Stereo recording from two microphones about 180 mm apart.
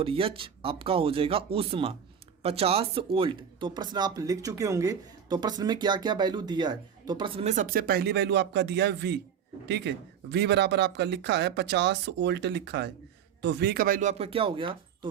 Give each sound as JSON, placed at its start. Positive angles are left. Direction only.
{"t": 0.0, "sound": "speech", "side_deg": -30}